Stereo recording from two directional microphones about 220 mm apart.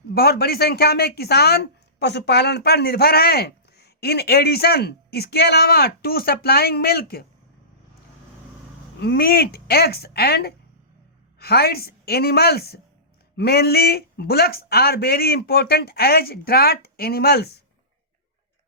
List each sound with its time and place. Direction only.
0.1 s speech: 45° left (ahead or behind)
9.0 s speech: 45° left (ahead or behind)